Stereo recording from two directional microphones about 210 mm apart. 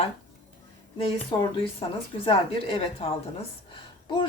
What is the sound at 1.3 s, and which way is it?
A woman's voice, 20° left (ahead or behind).